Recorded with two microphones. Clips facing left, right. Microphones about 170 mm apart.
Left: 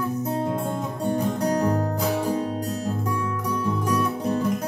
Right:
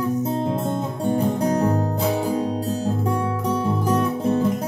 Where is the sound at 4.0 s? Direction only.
25° right (ahead or behind).